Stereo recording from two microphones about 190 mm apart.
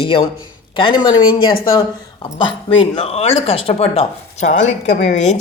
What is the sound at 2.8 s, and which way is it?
A woman's voice, 30° left (ahead or behind).